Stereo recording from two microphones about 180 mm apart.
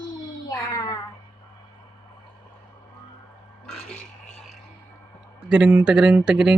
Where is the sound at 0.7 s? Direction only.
20° left (ahead or behind).